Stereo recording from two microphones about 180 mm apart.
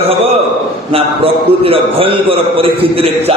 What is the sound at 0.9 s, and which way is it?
A man's voice, 30° right (ahead or behind).